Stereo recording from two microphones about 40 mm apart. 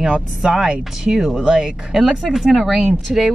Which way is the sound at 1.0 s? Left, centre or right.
Centre.